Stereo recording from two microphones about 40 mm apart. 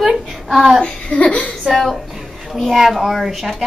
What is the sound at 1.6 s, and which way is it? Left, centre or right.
Speech, centre.